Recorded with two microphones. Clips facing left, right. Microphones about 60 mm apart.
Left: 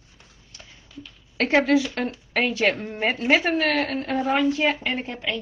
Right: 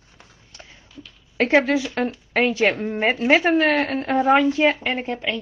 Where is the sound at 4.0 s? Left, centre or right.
Right.